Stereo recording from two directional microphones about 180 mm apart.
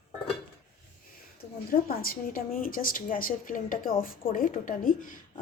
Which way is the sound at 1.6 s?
50° left (ahead or behind).